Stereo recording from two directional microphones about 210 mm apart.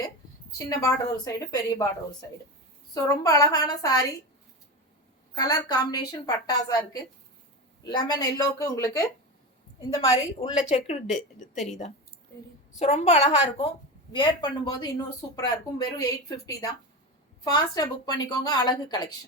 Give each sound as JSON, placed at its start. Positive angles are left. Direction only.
{"t": 0.6, "sound": "a woman's voice", "side_deg": 15}
{"t": 2.9, "sound": "a woman's voice", "side_deg": 15}
{"t": 5.3, "sound": "a woman's voice", "side_deg": 20}
{"t": 9.9, "sound": "speech", "side_deg": 25}
{"t": 11.5, "sound": "speech", "side_deg": 0}
{"t": 12.8, "sound": "a woman's voice", "side_deg": 30}